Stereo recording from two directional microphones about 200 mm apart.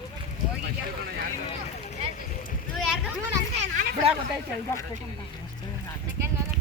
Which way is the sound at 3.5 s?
40° right (ahead or behind).